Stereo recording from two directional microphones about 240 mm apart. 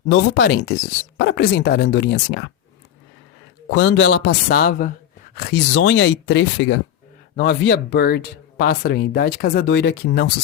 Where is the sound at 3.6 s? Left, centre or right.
Left.